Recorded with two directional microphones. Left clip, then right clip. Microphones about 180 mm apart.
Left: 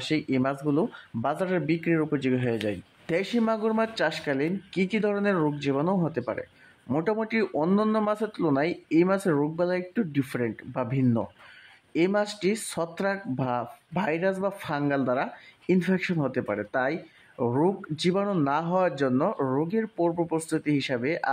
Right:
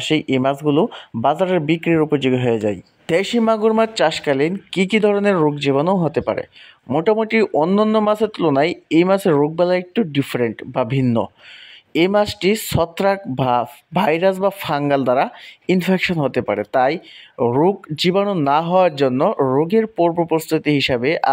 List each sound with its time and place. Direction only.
0.1 s speech: 30° right (ahead or behind)